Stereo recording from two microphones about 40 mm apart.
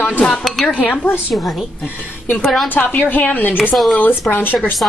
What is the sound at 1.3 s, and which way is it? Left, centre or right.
Music, centre.